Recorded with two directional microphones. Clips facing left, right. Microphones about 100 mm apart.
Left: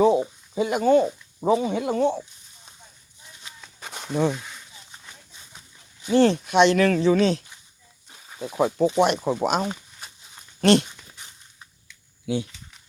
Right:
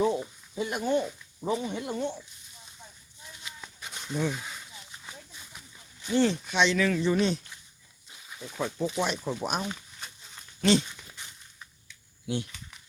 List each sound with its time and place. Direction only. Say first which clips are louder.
0.5 s speech: left 9 dB; 90° left
3.8 s a sound: left 9 dB; 45° left (ahead or behind)
4.0 s speech: left 7 dB; 65° left (ahead or behind)
4.4 s a sound: even; 5° right (ahead or behind)
6.1 s speech: left 7 dB; 65° left (ahead or behind); by 7.4 s 90° left
8.4 s speech: left 10 dB; 75° left (ahead or behind)
10.6 s speech: left 6 dB; 65° left (ahead or behind)